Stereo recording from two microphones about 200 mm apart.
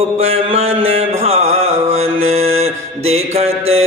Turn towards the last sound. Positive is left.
turn(degrees=-30)  # may be behind; listen again after turning